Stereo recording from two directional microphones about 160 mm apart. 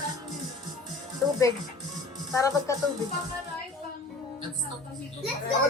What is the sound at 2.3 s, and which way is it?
Speech, 20° left (ahead or behind).